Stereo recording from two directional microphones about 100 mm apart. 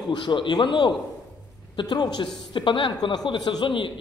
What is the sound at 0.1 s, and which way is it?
A man's voice, 55° left (ahead or behind).